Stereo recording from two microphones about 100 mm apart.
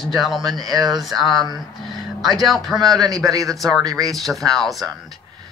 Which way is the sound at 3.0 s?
40° right (ahead or behind).